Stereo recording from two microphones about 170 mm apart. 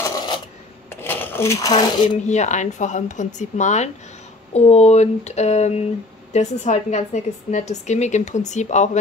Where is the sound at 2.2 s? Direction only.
45° left (ahead or behind).